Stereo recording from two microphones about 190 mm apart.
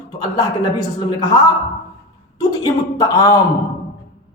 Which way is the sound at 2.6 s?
20° left (ahead or behind).